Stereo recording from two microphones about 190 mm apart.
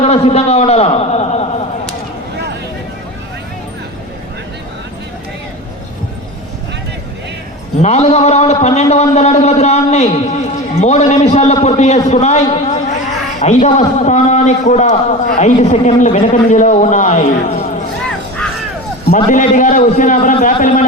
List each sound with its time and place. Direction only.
0.0 s a sound: 35° left (ahead or behind)
7.8 s a man's voice: 35° left (ahead or behind)
19.1 s a man's voice: 40° left (ahead or behind)